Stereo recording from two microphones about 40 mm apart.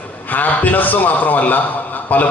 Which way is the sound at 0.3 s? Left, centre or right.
Left.